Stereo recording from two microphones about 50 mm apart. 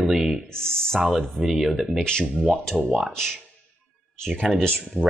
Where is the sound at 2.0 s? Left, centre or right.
Centre.